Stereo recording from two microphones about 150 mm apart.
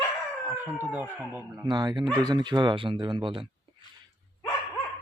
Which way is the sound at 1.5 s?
25° right (ahead or behind).